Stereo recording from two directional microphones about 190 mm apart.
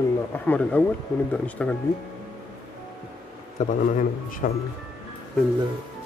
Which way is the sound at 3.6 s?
40° left (ahead or behind).